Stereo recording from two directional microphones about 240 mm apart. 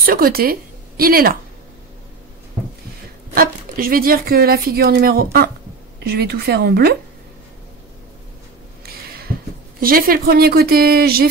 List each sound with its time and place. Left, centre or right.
0.0 s speech: right
3.3 s speech: right
9.8 s speech: right